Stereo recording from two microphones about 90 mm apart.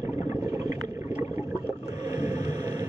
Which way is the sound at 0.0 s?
35° right (ahead or behind).